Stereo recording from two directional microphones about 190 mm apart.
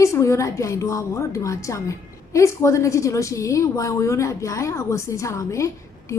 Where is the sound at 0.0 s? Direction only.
15° left (ahead or behind).